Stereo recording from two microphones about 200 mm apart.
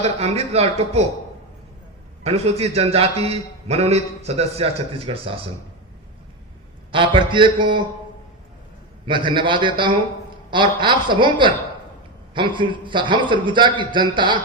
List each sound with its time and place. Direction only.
0.0 s a man's voice: 30° right (ahead or behind)
2.2 s a man's voice: 30° right (ahead or behind)
6.9 s a man's voice: 25° right (ahead or behind)
9.0 s a man's voice: 25° right (ahead or behind)